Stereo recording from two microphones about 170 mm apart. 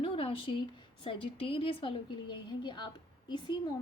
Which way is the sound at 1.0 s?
30° left (ahead or behind).